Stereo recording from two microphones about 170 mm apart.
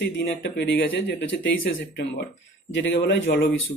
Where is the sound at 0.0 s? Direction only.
90° left.